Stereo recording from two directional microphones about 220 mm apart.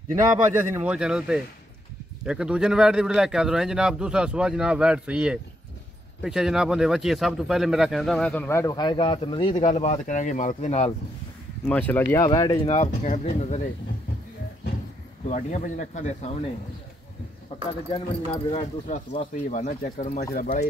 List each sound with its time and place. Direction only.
0.7 s speech: 5° right (ahead or behind); by 9.6 s 20° left (ahead or behind)
9.6 s speech: 30° left (ahead or behind)
11.6 s speech: 5° left (ahead or behind)
12.6 s speech: 30° left (ahead or behind)
15.2 s speech: 35° left (ahead or behind)
17.9 s speech: 25° left (ahead or behind)